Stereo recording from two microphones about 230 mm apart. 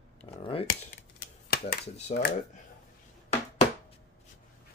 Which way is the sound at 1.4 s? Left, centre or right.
Left.